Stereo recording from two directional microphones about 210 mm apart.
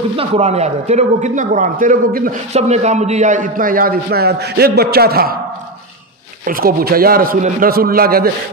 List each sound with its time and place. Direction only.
0.1 s a man's voice: 30° right (ahead or behind); by 5.4 s 45° right (ahead or behind)
6.4 s a man's voice: 45° right (ahead or behind)